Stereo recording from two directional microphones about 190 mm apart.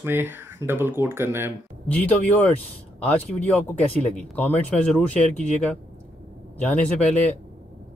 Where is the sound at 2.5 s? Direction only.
10° left (ahead or behind).